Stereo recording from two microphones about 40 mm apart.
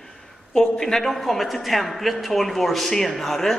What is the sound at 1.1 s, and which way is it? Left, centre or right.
A man's voice, centre.